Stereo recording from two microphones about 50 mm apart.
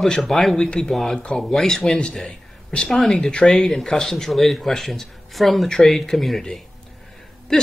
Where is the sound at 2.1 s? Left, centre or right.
Centre.